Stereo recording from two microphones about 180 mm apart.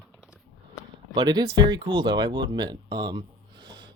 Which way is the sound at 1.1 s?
20° right (ahead or behind).